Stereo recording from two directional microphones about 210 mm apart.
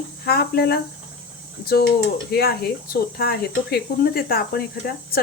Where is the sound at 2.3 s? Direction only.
50° left (ahead or behind).